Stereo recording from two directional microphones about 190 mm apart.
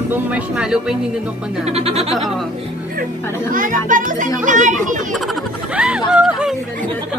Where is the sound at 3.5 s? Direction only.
45° right (ahead or behind).